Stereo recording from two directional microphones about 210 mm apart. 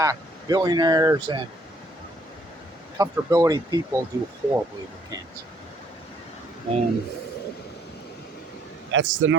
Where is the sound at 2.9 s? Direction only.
15° right (ahead or behind).